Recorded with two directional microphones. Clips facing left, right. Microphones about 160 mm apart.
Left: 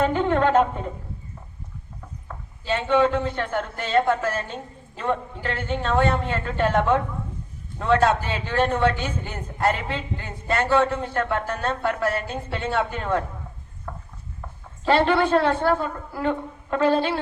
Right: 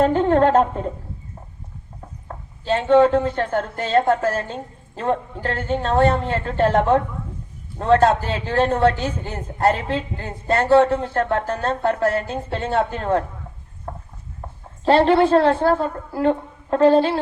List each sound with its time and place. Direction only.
0.0 s a woman's voice: 35° right (ahead or behind)
2.2 s a woman's voice: 40° right (ahead or behind)
13.9 s a sound: 40° right (ahead or behind)
14.4 s a woman's voice: 30° right (ahead or behind)